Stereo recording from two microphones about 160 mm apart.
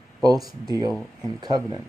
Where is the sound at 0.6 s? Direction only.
25° right (ahead or behind).